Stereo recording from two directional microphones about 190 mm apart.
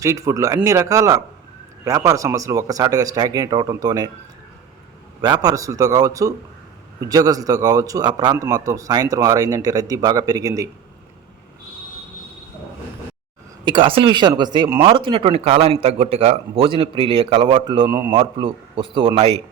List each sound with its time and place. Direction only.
0.0 s a man's voice: 15° right (ahead or behind)
5.2 s a man's voice: 20° right (ahead or behind)
13.7 s a man's voice: 25° right (ahead or behind)
17.8 s speech: 15° right (ahead or behind)
18.2 s a man's voice: 25° right (ahead or behind)